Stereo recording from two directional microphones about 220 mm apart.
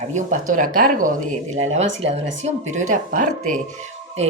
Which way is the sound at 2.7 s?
35° right (ahead or behind).